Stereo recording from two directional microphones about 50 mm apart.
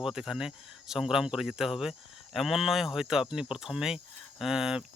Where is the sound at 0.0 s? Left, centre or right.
Centre.